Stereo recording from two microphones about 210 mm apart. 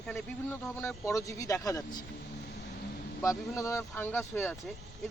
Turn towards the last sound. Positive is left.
turn(degrees=10)  # may be behind; listen again after turning